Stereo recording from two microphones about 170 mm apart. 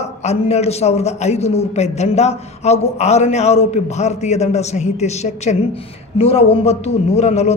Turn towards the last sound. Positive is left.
turn(degrees=40)  # may be behind; listen again after turning